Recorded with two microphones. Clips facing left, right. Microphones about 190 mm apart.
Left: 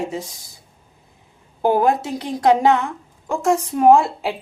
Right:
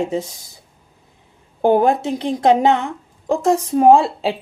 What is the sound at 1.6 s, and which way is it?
A woman's voice, 25° right (ahead or behind).